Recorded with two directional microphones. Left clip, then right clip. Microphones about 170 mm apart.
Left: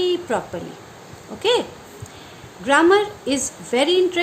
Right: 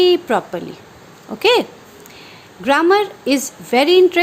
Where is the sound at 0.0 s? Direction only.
50° right (ahead or behind).